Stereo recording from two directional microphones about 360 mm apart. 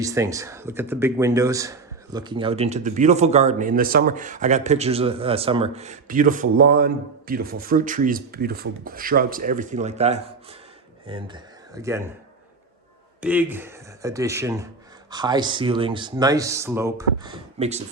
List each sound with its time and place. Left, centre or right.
0.0 s speech: centre
13.2 s speech: centre